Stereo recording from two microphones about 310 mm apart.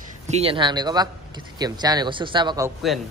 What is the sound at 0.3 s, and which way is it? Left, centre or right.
Speech, centre.